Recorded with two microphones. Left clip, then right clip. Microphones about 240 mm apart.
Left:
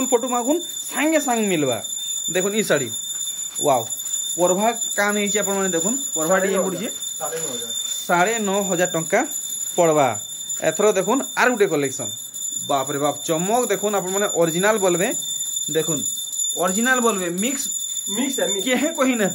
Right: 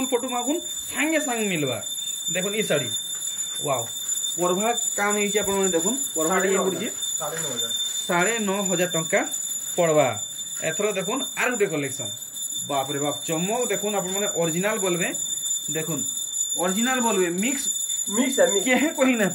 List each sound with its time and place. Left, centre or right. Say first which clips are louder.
0.0 s speech: left 5 dB; centre
4.4 s speech: left 5 dB; centre
8.1 s speech: left 5 dB; centre
16.6 s speech: left 5 dB; centre
18.6 s speech: left 1 dB; centre